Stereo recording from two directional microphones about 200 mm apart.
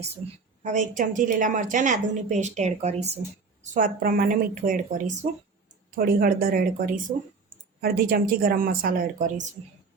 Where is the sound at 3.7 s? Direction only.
45° right (ahead or behind).